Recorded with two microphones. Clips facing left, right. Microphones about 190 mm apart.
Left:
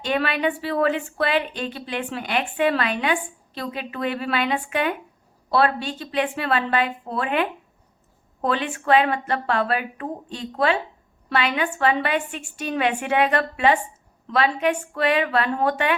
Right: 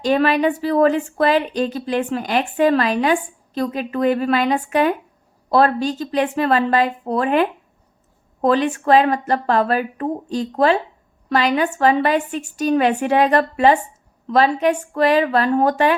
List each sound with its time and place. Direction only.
0.0 s speech: 40° right (ahead or behind)